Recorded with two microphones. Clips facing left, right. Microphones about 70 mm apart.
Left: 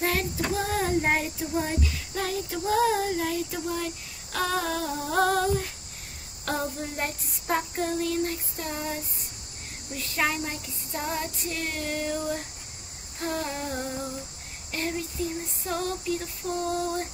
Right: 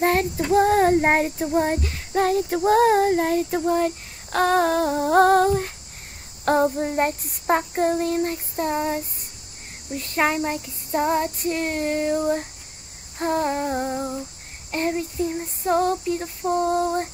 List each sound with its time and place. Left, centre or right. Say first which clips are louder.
0.0 s child singing: right 7 dB; right